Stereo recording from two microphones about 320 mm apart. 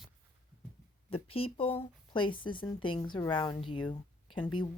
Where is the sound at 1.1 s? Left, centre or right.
Centre.